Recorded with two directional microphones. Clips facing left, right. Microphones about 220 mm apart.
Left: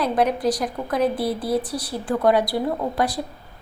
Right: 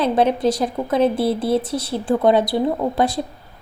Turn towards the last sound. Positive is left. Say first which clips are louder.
# right 4 dB
turn(degrees=-25)  # may be behind; listen again after turning